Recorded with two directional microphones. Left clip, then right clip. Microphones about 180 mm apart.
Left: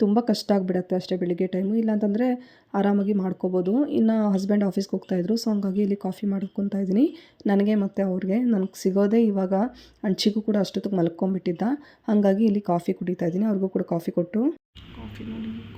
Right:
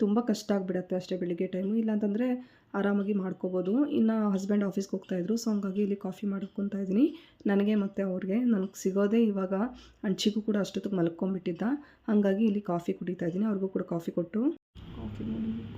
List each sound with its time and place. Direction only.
0.0 s speech: 25° left (ahead or behind)